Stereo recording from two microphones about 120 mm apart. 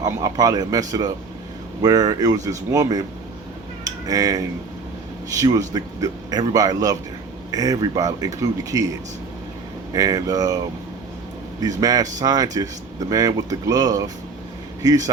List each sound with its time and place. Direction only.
0.0 s a man's voice: 30° right (ahead or behind)
11.6 s a man's voice: 30° right (ahead or behind)